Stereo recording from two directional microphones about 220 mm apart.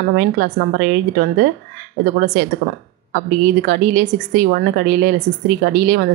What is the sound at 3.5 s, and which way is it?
A woman's voice, 50° right (ahead or behind).